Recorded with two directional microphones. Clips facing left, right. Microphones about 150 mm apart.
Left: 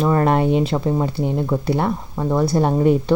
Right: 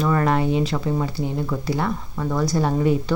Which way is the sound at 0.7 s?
30° left (ahead or behind).